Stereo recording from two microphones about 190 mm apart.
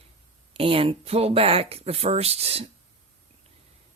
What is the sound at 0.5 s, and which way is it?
Speech, 30° right (ahead or behind).